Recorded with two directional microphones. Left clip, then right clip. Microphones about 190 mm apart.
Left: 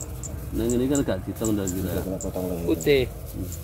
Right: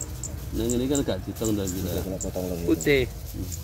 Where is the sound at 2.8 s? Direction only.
15° right (ahead or behind).